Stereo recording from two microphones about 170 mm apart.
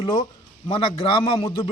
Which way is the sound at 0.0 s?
30° left (ahead or behind).